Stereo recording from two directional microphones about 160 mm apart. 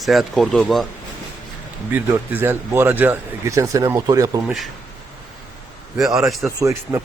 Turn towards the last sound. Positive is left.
turn(degrees=-20)  # may be behind; listen again after turning